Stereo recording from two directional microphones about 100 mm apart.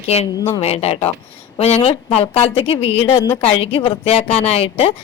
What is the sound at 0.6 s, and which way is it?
A woman's voice, 90° left.